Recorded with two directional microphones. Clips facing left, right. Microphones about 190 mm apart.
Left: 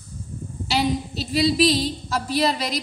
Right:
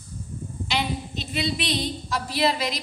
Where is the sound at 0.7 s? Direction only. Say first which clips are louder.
Left 6 dB; 35° left (ahead or behind).